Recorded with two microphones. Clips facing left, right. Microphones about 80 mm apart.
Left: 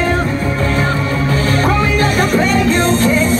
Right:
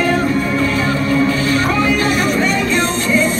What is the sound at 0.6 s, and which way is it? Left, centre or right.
Music, left.